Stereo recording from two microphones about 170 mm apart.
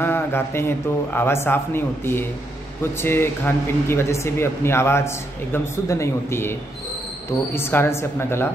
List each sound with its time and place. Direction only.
0.0 s speech: 15° left (ahead or behind)
7.5 s speech: 15° left (ahead or behind)